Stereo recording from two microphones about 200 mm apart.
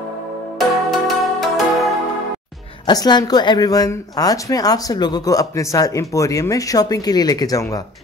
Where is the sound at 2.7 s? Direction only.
20° left (ahead or behind).